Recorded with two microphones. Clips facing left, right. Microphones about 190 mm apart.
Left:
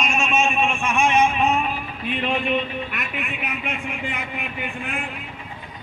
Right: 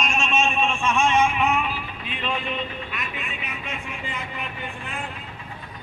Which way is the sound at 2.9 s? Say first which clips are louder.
Left 3 dB; 60° left (ahead or behind).